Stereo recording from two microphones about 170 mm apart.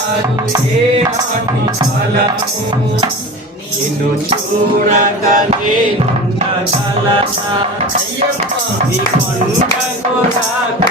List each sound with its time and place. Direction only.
4.9 s mantra: 45° right (ahead or behind)